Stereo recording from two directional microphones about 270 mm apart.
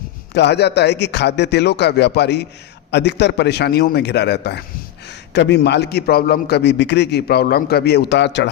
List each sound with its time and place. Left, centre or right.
0.3 s a man's voice: left